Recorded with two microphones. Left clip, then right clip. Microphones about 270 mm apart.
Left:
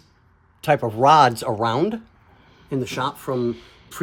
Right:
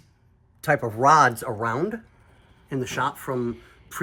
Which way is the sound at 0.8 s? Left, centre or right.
Centre.